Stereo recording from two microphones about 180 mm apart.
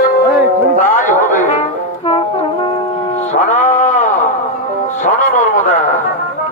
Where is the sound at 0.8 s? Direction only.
45° left (ahead or behind).